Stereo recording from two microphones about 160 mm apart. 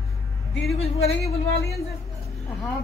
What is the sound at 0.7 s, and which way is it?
Speech, 40° left (ahead or behind).